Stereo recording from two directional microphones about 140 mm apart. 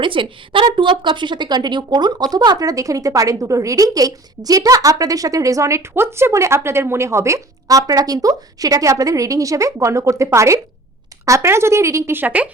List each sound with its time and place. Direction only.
0.0 s a woman's voice: 40° right (ahead or behind); by 12.5 s 10° right (ahead or behind)